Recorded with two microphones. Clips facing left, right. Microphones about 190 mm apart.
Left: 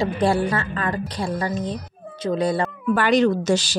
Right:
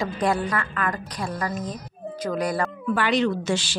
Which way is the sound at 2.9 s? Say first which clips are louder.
Left 5 dB; 45° left (ahead or behind).